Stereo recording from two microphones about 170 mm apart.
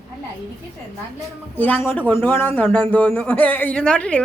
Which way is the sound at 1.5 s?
10° left (ahead or behind).